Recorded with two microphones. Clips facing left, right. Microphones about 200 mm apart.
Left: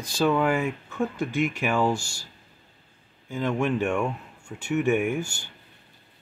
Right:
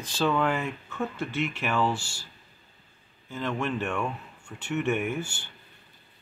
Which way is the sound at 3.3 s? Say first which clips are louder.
Left 5 dB; 15° left (ahead or behind).